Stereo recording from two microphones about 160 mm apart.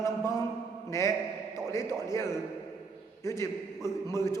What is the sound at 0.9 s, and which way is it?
A man's voice, 20° left (ahead or behind).